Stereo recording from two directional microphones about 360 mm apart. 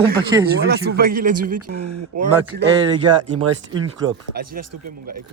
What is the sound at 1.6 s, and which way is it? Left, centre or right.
Speech, right.